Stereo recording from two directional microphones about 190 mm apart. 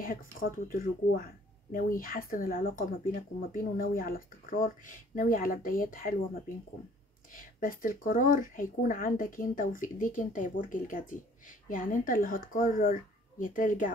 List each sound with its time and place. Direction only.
0.0 s speech: 50° left (ahead or behind)
7.3 s speech: 45° left (ahead or behind)